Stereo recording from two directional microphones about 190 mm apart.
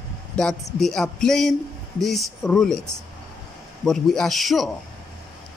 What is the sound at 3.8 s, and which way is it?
Speech, centre (ahead or behind).